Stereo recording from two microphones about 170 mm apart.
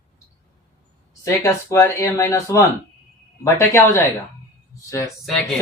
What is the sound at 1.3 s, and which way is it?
Speech, 20° left (ahead or behind).